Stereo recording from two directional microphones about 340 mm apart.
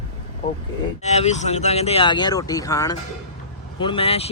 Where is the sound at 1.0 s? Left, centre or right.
Centre.